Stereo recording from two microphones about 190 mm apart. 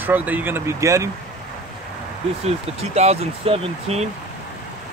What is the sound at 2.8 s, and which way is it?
Speech, 35° right (ahead or behind).